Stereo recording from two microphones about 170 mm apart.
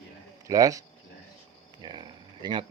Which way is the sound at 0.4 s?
20° right (ahead or behind).